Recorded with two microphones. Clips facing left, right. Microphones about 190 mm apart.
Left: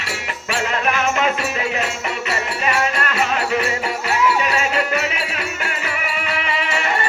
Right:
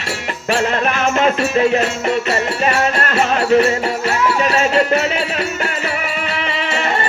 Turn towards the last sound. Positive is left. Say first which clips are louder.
# right 2 dB
turn(degrees=-30)  # may be behind; listen again after turning